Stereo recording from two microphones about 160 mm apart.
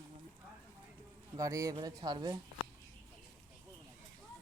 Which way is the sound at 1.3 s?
20° right (ahead or behind).